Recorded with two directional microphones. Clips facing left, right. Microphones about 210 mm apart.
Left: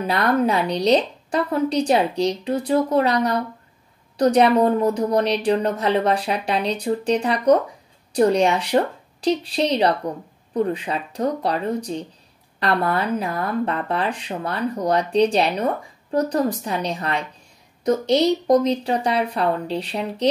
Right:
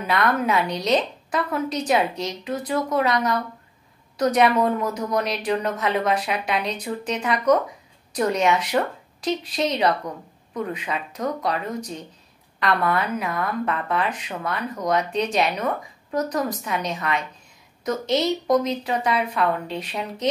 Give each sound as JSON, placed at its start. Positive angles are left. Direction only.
{"t": 0.0, "sound": "speech", "side_deg": 35}
{"t": 4.2, "sound": "speech", "side_deg": 30}